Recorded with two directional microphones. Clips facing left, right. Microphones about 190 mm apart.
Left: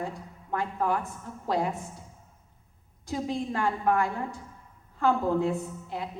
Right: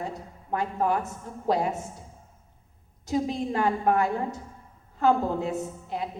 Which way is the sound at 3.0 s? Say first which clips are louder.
Right 4 dB; 20° right (ahead or behind).